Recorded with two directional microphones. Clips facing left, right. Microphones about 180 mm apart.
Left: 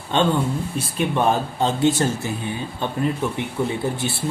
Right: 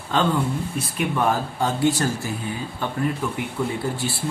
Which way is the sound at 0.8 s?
30° left (ahead or behind).